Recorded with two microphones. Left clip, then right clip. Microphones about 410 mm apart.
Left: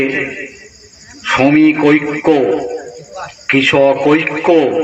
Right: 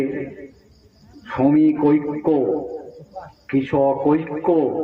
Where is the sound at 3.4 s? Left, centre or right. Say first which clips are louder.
Left 9 dB; right.